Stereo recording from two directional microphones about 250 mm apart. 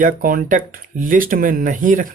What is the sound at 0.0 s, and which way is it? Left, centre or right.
Speech, right.